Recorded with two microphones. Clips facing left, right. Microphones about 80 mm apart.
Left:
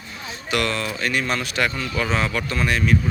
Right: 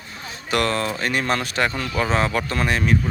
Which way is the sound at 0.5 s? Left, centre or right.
Right.